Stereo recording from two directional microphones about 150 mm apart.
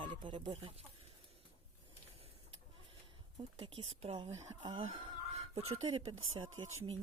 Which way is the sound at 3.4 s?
35° right (ahead or behind).